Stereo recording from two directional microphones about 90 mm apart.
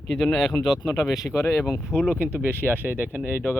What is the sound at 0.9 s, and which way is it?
Speech, 40° left (ahead or behind).